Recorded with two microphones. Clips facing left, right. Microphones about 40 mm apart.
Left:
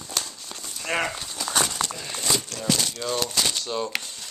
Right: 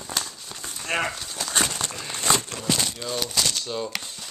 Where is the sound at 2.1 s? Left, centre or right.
Right.